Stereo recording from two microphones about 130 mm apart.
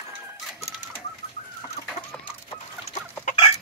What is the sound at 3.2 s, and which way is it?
Chicken, 60° left (ahead or behind).